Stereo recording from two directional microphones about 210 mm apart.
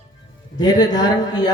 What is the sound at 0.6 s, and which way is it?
Speech, 20° left (ahead or behind).